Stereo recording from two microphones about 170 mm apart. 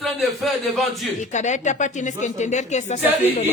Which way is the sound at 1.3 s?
45° left (ahead or behind).